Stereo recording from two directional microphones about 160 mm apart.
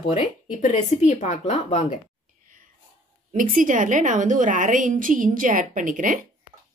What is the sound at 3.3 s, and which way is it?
A woman's voice, 60° right (ahead or behind).